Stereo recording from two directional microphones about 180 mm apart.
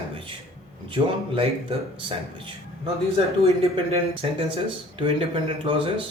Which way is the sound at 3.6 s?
35° right (ahead or behind).